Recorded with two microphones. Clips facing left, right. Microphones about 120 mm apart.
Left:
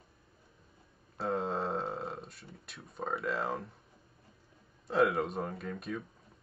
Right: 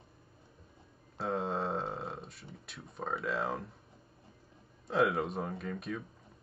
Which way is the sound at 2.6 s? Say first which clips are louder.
Left 1 dB; centre (ahead or behind).